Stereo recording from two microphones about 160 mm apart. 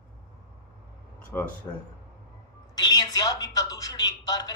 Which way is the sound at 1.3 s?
10° left (ahead or behind).